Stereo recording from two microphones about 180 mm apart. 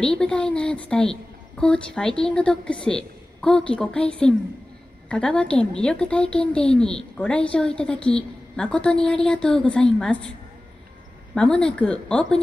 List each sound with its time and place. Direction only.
0.0 s a woman's voice: 5° left (ahead or behind)
11.3 s a woman's voice: 5° left (ahead or behind)